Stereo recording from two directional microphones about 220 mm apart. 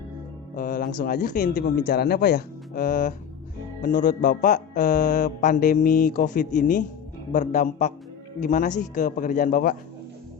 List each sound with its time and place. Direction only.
0.5 s a man's voice: 40° left (ahead or behind)